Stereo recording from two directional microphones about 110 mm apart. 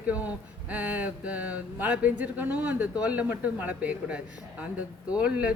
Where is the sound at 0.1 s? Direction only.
15° right (ahead or behind).